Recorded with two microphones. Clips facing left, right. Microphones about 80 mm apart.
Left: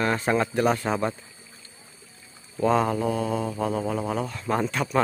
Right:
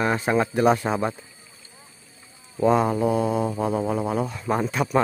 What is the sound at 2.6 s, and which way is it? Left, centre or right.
Mantra, centre.